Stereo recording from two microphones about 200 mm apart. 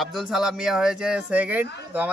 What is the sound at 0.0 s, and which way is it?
Speech, centre (ahead or behind).